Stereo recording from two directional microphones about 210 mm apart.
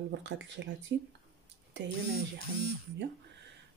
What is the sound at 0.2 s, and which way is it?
Speech, 60° right (ahead or behind).